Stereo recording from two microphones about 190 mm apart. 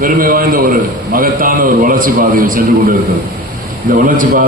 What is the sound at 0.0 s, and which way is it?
A man's voice, 50° right (ahead or behind).